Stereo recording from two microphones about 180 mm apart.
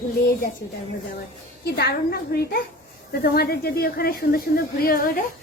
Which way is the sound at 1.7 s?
60° left (ahead or behind).